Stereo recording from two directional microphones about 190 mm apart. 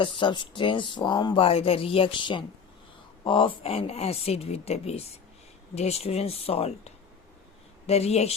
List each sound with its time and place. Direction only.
0.0 s speech: 25° left (ahead or behind)